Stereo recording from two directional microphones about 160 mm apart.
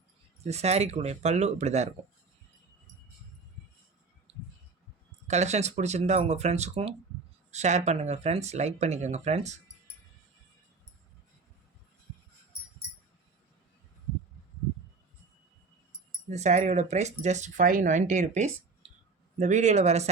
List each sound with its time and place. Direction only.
0.4 s speech: 40° right (ahead or behind)
5.3 s speech: 45° right (ahead or behind)
16.3 s speech: 45° right (ahead or behind)